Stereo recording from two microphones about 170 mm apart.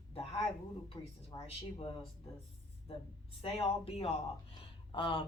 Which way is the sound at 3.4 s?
35° left (ahead or behind).